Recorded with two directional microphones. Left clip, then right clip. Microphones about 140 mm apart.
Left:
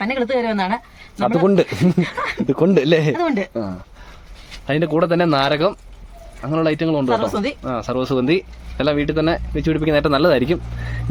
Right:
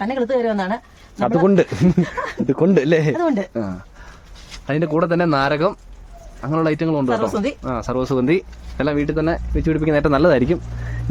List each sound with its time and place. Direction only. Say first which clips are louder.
0.0 s speech: even; 35° right (ahead or behind)
1.1 s speech: even; 25° right (ahead or behind)
3.2 s speech: even; 50° right (ahead or behind)
3.5 s speech: even; 25° right (ahead or behind)
4.6 s speech: left 1 dB; centre (ahead or behind)
9.9 s speech: even; 30° right (ahead or behind)